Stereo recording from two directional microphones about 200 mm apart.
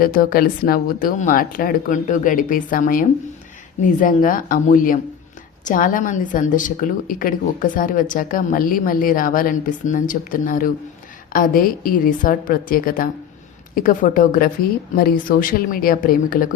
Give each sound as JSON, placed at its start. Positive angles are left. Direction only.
{"t": 0.0, "sound": "a woman's voice", "side_deg": 45}